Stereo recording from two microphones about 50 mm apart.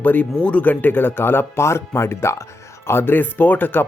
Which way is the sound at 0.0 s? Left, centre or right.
Left.